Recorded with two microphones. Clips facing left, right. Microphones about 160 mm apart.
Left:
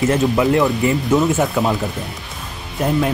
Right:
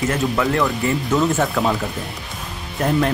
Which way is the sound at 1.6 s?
5° left (ahead or behind).